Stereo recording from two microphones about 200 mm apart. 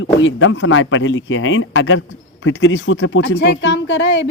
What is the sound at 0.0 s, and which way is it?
A woman's voice, 75° left (ahead or behind).